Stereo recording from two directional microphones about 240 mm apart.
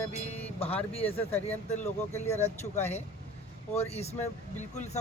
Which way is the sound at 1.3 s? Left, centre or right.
Left.